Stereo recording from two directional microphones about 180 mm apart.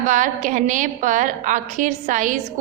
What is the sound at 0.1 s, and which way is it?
A woman's voice, 45° right (ahead or behind).